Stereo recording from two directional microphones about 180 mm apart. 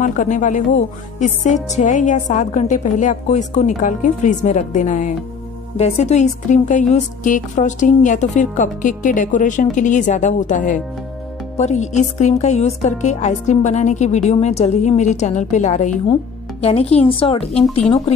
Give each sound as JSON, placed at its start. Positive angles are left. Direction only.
{"t": 0.0, "sound": "a woman's voice", "side_deg": 45}